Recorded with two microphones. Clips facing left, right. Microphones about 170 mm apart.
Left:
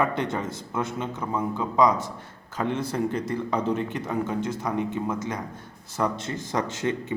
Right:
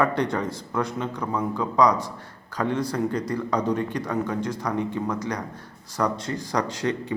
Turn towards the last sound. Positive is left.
turn(degrees=25)  # may be behind; listen again after turning